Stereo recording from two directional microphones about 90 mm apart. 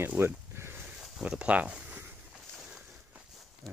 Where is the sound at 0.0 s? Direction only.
25° right (ahead or behind).